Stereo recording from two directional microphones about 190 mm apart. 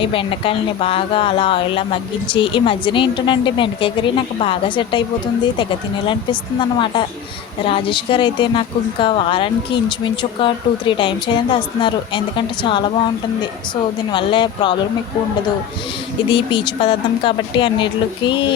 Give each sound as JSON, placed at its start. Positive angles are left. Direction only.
{"t": 0.0, "sound": "speech", "side_deg": 30}
{"t": 6.6, "sound": "speech", "side_deg": 25}
{"t": 14.1, "sound": "speech", "side_deg": 25}
{"t": 16.3, "sound": "speech", "side_deg": 25}